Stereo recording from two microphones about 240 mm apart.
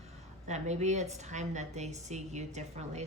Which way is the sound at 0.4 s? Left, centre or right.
Right.